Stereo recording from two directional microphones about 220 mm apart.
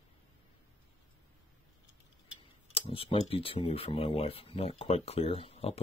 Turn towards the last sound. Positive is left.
turn(degrees=25)  # may be behind; listen again after turning